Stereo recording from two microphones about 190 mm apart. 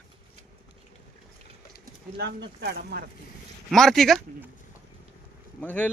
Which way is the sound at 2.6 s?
55° right (ahead or behind).